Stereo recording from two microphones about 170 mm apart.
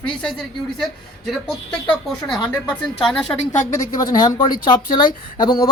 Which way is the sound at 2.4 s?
10° left (ahead or behind).